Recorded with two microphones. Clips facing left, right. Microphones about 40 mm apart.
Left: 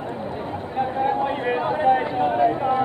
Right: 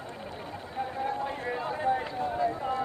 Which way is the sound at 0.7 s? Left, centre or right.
Left.